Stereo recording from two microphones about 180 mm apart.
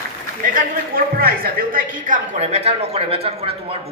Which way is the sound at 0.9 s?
55° right (ahead or behind).